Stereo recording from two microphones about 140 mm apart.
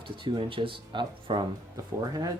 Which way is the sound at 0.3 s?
40° right (ahead or behind).